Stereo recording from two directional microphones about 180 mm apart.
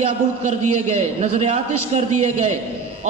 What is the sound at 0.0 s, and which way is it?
A man's voice, 35° right (ahead or behind).